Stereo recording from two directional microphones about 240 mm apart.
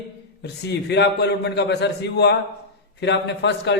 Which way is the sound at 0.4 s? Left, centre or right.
Left.